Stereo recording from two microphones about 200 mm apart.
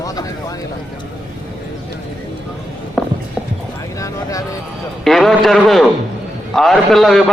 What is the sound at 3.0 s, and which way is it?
Walk, 5° left (ahead or behind).